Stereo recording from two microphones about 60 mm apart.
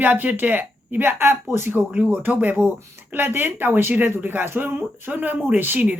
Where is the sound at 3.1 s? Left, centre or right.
Right.